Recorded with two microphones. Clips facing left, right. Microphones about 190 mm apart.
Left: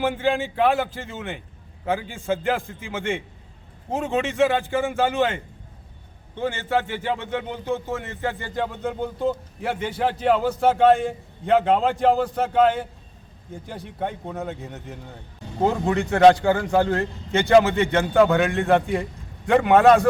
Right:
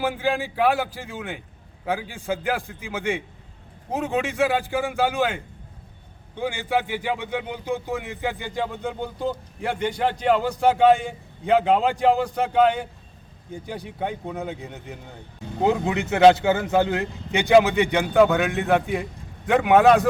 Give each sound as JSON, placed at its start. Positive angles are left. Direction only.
{"t": 0.0, "sound": "a man's voice", "side_deg": 0}
{"t": 6.3, "sound": "speech", "side_deg": -10}
{"t": 8.3, "sound": "a man's voice", "side_deg": 0}
{"t": 17.7, "sound": "speech", "side_deg": -15}
{"t": 18.1, "sound": "a man's voice", "side_deg": 0}